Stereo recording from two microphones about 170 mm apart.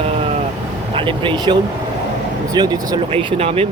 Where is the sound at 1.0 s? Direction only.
30° right (ahead or behind).